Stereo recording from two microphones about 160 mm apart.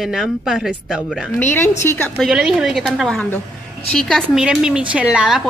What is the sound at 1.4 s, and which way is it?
Speech, 15° left (ahead or behind).